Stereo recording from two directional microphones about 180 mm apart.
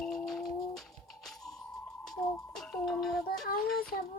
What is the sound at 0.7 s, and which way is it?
Music, centre (ahead or behind).